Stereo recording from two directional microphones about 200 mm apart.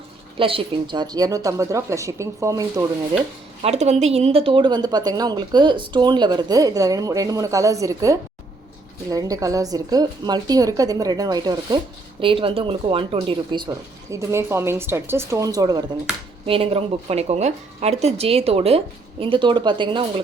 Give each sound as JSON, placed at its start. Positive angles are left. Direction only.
{"t": 0.3, "sound": "a woman's voice", "side_deg": -25}
{"t": 3.6, "sound": "a woman's voice", "side_deg": -35}